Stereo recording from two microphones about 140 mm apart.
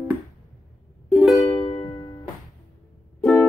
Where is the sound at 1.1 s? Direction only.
Centre (ahead or behind).